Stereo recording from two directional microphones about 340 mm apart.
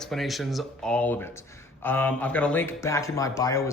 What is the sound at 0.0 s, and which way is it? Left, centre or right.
Speech, centre.